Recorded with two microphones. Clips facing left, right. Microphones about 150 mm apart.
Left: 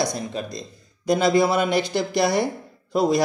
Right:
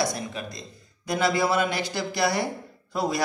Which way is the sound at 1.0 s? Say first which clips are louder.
Left 5 dB; 20° left (ahead or behind).